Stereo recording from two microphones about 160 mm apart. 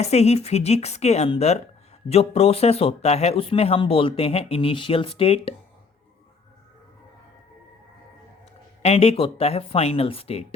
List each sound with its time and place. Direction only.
0.0 s speech: 40° left (ahead or behind)
8.8 s speech: 40° left (ahead or behind)